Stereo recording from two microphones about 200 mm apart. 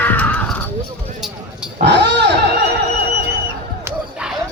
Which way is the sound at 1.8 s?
60° right (ahead or behind).